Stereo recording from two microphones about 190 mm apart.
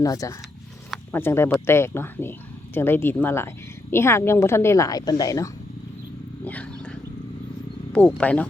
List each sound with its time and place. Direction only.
0.0 s a woman's voice: 20° left (ahead or behind)
0.9 s a sound: 10° left (ahead or behind)
1.6 s a woman's voice: 15° left (ahead or behind)
6.4 s wild animals: 10° left (ahead or behind)
7.9 s a woman's voice: 5° left (ahead or behind)